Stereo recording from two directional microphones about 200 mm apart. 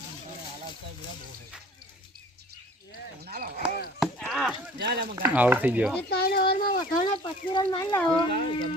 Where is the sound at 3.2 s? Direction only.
50° right (ahead or behind).